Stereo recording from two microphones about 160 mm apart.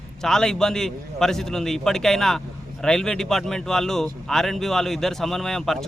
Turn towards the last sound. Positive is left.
turn(degrees=0)  # may be behind; listen again after turning